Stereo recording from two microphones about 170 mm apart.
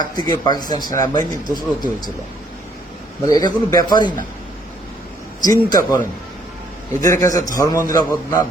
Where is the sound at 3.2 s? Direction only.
20° left (ahead or behind).